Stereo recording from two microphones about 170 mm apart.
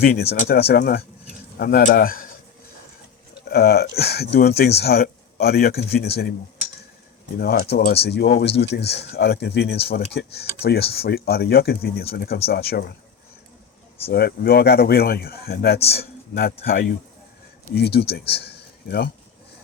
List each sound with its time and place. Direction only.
0.3 s speech: 60° left (ahead or behind)
3.5 s speech: 70° left (ahead or behind)
7.3 s speech: 65° left (ahead or behind)
14.1 s speech: 65° left (ahead or behind)
17.7 s speech: 70° left (ahead or behind)